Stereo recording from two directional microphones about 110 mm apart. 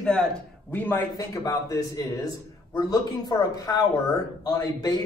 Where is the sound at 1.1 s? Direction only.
30° left (ahead or behind).